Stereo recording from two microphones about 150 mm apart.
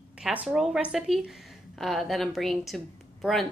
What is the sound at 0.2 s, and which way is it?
A woman's voice, 10° right (ahead or behind).